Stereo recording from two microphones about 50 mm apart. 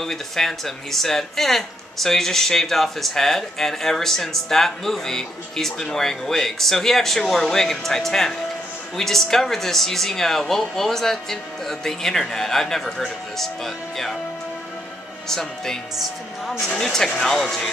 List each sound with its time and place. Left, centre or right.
0.0 s speech: centre
15.2 s speech: centre